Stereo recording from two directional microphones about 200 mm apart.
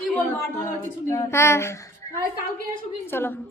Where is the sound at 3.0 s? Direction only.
10° left (ahead or behind).